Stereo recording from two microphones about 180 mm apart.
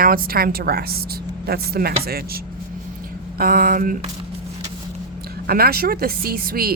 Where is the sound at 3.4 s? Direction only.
55° right (ahead or behind).